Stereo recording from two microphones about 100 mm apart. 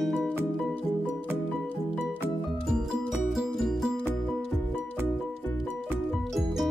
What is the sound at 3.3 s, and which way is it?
Music, centre (ahead or behind).